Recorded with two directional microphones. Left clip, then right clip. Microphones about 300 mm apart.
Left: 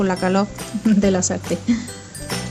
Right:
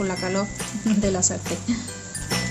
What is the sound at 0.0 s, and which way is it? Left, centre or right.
Speech, left.